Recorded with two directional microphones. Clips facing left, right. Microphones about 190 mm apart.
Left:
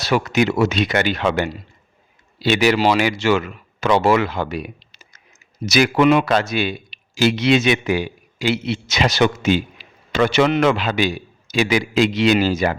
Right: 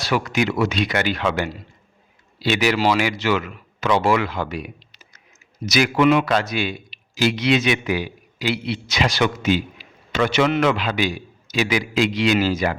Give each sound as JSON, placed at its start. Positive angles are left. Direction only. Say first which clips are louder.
{"t": 0.1, "sound": "a man's voice", "louder": "left 3 dB", "side_deg": 25}